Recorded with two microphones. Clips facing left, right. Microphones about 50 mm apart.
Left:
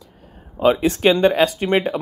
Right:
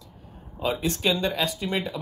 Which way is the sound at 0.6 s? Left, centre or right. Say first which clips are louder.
Left 10 dB; left.